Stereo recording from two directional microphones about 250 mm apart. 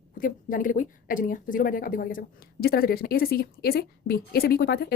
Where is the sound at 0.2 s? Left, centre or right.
Left.